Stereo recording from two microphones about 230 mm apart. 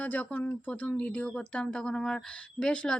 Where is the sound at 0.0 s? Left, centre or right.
Centre.